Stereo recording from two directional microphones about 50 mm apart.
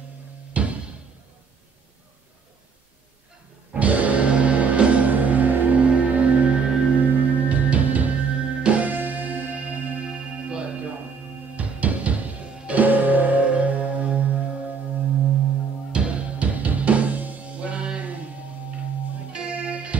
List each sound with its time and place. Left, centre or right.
0.5 s music: right
3.7 s music: right
10.0 s music: centre
12.8 s music: right
15.9 s music: right
19.3 s music: right